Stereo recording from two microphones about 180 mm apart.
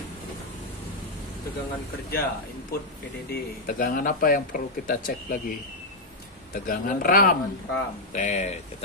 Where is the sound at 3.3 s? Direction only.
50° left (ahead or behind).